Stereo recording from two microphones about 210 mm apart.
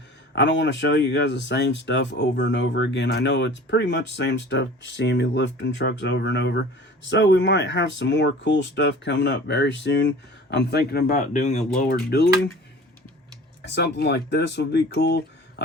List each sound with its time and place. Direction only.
0.3 s speech: 60° left (ahead or behind)
11.1 s speech: 35° left (ahead or behind)
11.8 s speech: 45° left (ahead or behind)
13.6 s speech: 55° left (ahead or behind)